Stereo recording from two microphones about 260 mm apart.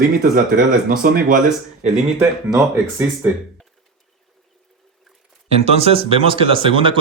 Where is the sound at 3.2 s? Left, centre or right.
Centre.